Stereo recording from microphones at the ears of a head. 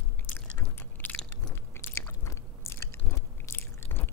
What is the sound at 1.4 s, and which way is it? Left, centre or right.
Biting, left.